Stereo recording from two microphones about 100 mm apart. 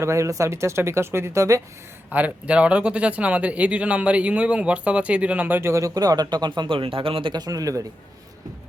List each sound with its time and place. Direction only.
0.0 s speech: 30° right (ahead or behind)
2.0 s speech: 15° right (ahead or behind); by 6.5 s 45° right (ahead or behind)
6.6 s speech: 60° right (ahead or behind)
7.4 s a man's voice: 35° right (ahead or behind)